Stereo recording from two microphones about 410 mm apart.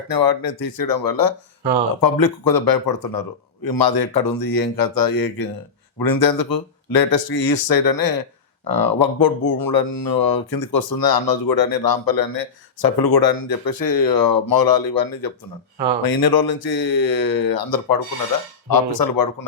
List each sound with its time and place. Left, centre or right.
0.1 s speech: left